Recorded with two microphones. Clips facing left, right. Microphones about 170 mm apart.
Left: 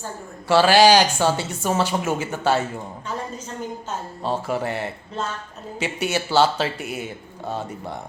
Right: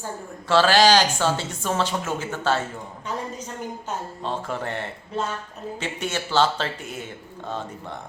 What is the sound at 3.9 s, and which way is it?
Speech, 15° right (ahead or behind).